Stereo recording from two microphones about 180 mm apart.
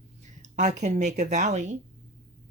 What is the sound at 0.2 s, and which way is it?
Speech, 40° right (ahead or behind).